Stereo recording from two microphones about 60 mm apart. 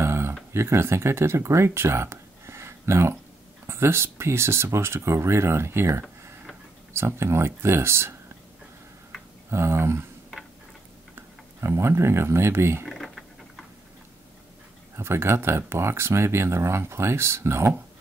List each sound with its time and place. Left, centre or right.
0.0 s speech: right
9.5 s speech: right
11.1 s speech: right
12.8 s a sound: centre
15.0 s speech: right